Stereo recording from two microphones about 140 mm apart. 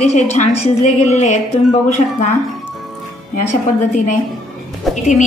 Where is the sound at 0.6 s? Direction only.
55° left (ahead or behind).